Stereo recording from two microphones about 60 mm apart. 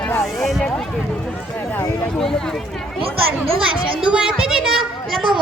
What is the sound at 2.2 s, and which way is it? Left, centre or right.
Speech, centre.